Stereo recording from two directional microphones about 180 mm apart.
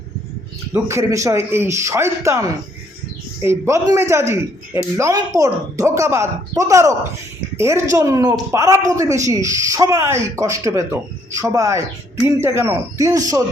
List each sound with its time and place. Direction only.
0.7 s a woman's voice: 15° right (ahead or behind)